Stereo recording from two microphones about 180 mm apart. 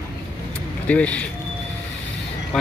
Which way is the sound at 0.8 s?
5° left (ahead or behind).